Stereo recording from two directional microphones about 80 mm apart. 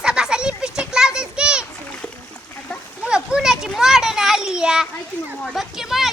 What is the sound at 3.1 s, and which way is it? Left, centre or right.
Children playing, centre.